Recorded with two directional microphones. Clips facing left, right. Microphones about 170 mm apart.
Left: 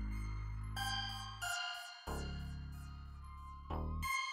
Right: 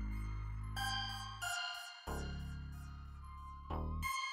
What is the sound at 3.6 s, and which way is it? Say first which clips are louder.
Music: even; centre (ahead or behind).